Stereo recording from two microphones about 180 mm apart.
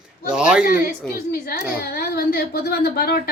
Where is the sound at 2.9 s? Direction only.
60° left (ahead or behind).